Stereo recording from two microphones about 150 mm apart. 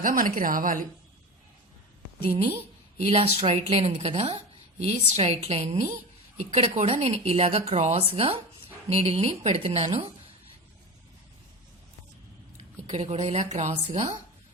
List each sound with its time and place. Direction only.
0.0 s a woman's voice: 65° right (ahead or behind)
3.1 s a woman's voice: 40° right (ahead or behind)
12.5 s speech: 45° right (ahead or behind)